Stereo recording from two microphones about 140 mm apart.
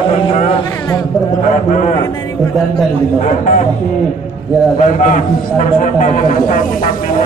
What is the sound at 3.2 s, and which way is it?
Speech, 65° left (ahead or behind).